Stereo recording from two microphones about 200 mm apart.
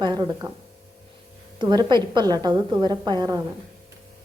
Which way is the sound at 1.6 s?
25° right (ahead or behind).